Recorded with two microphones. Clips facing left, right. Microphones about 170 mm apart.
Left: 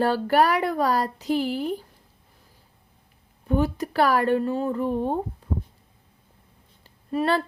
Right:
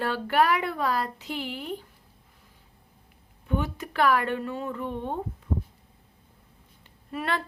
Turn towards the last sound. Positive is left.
turn(degrees=35)  # may be behind; listen again after turning